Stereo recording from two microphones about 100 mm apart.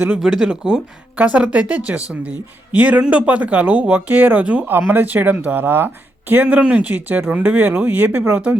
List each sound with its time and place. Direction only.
0.2 s speech: 5° right (ahead or behind)